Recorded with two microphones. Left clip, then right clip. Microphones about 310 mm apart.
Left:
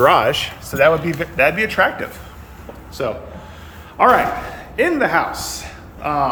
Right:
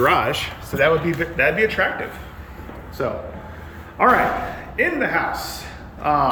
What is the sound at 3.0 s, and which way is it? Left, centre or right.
Speech, centre.